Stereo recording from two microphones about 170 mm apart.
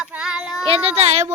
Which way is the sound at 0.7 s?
35° right (ahead or behind).